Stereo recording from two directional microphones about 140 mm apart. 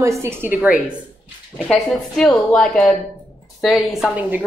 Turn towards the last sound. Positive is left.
turn(degrees=0)  # may be behind; listen again after turning